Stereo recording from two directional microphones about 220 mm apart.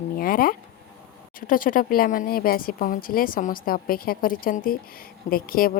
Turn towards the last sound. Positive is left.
turn(degrees=40)  # may be behind; listen again after turning